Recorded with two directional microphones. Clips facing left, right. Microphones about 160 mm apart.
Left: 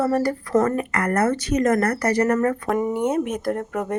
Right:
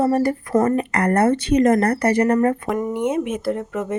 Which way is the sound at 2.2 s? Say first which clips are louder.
Right 2 dB; 15° right (ahead or behind).